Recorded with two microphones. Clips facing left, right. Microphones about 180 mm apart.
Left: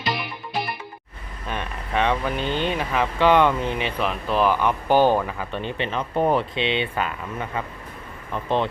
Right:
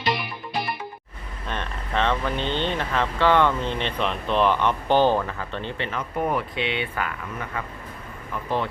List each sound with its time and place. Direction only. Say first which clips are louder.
0.0 s music: right 1 dB; centre (ahead or behind)
1.5 s speech: left 1 dB; 10° left (ahead or behind)